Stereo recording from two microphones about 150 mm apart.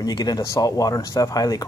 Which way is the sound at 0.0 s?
25° left (ahead or behind).